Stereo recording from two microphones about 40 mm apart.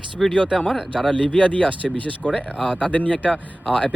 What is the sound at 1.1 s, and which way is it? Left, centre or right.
Speech, left.